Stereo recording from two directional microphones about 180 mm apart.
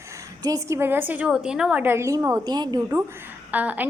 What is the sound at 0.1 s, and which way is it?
A woman's voice, 20° right (ahead or behind).